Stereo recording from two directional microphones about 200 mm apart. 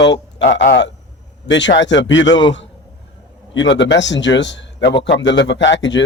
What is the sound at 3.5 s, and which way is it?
Speech, 65° left (ahead or behind).